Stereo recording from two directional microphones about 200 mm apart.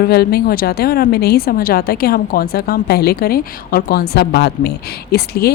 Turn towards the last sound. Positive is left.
turn(degrees=50)  # may be behind; listen again after turning